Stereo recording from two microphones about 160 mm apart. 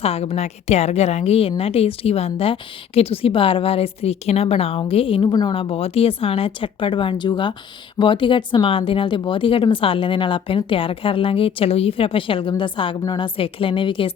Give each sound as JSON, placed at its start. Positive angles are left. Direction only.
{"t": 0.0, "sound": "a woman's voice", "side_deg": 40}